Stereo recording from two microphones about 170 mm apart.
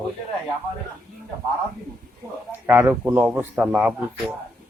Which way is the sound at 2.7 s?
10° right (ahead or behind).